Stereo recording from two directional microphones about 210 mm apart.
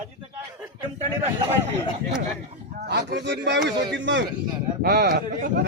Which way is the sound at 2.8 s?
55° right (ahead or behind).